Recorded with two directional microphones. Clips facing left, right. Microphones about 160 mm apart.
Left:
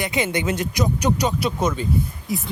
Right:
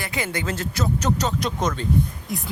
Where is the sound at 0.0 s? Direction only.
20° left (ahead or behind).